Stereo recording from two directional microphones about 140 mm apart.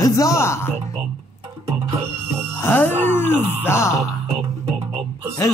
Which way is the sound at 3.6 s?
20° left (ahead or behind).